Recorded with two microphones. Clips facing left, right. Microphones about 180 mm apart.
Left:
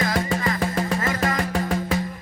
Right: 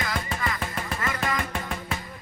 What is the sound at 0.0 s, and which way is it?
Music, 40° left (ahead or behind).